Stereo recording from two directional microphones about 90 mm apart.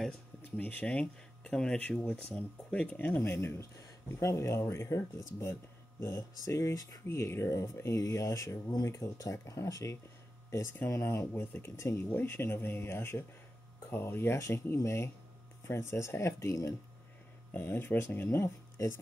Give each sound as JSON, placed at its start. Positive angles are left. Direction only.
{"t": 0.6, "sound": "speech", "side_deg": 15}
{"t": 17.5, "sound": "speech", "side_deg": 20}